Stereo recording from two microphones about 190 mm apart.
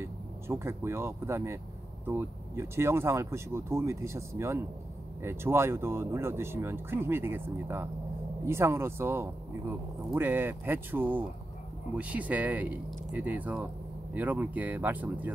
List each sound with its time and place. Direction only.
0.0 s speech: 15° right (ahead or behind)